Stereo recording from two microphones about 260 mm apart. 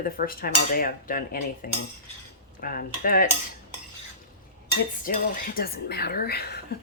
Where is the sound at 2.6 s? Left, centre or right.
Left.